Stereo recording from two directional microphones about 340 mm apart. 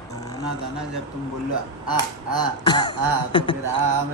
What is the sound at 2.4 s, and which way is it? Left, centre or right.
Speech, centre.